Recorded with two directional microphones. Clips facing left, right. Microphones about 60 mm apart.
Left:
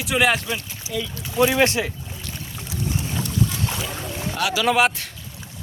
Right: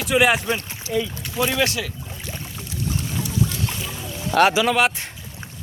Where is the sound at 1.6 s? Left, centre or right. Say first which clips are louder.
Left 3 dB; left.